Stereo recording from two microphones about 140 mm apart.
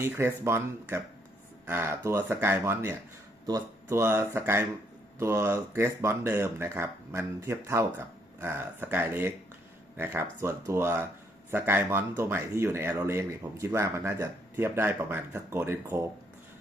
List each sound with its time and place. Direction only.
0.0 s speech: 20° right (ahead or behind)